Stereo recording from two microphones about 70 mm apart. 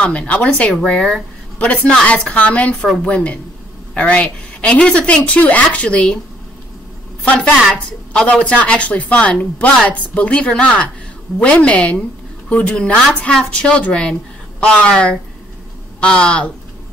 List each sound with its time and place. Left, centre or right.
0.3 s a woman's voice: centre
7.3 s speech: centre